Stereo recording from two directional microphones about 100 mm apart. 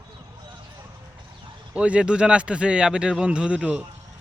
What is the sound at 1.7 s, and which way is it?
Speech, 10° right (ahead or behind).